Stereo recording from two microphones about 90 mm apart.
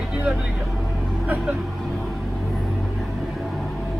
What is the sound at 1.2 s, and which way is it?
Speech, 15° right (ahead or behind).